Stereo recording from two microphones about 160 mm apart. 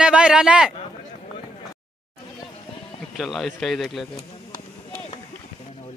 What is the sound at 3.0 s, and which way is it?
Speech, centre (ahead or behind).